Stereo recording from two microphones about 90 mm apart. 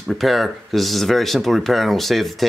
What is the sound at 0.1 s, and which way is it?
Speech, centre (ahead or behind).